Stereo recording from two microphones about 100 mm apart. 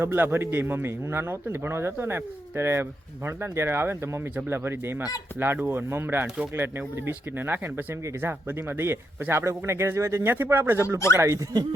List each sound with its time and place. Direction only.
0.0 s speech: 25° right (ahead or behind)
6.2 s speech: 10° right (ahead or behind)
6.6 s speech: 25° right (ahead or behind)